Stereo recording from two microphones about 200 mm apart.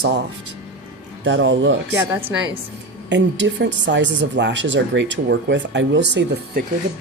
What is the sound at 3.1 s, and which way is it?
Speech, 65° right (ahead or behind).